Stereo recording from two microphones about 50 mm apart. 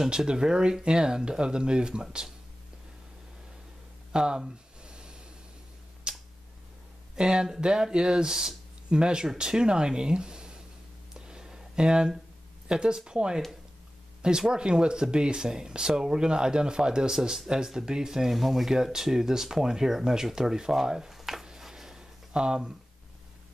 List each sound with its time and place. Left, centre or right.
0.0 s speech: centre
4.1 s a sound: centre
6.1 s tick-tock: centre
7.2 s speech: centre
11.1 s a sound: centre
12.6 s speech: centre
14.5 s speech: centre